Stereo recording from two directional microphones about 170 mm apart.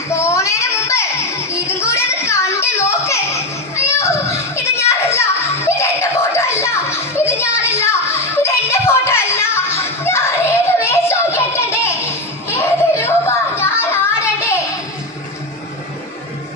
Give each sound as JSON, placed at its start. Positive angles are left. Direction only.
{"t": 0.1, "sound": "child singing", "side_deg": 15}
{"t": 5.6, "sound": "music", "side_deg": 15}
{"t": 7.3, "sound": "a sound", "side_deg": 15}
{"t": 8.4, "sound": "music", "side_deg": 15}